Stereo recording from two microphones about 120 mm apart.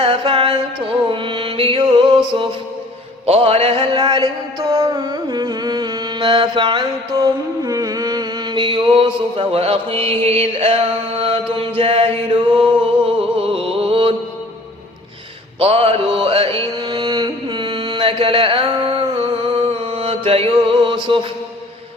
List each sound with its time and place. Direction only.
0.0 s music: 50° right (ahead or behind)
1.8 s music: 40° right (ahead or behind); by 3.8 s 55° right (ahead or behind)
3.9 s music: 35° right (ahead or behind)
7.6 s mantra: 30° right (ahead or behind); by 14.1 s 50° right (ahead or behind)
15.5 s music: 55° right (ahead or behind)
16.9 s mantra: 35° right (ahead or behind)
19.2 s music: 50° right (ahead or behind)